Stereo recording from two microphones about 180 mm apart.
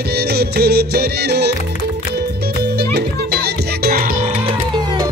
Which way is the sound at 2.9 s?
65° right (ahead or behind).